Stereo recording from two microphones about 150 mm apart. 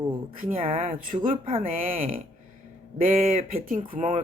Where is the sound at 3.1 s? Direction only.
45° right (ahead or behind).